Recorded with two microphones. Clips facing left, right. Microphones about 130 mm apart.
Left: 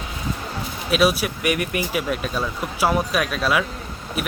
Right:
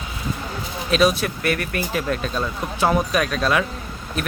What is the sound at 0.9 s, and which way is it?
Speech, 5° left (ahead or behind).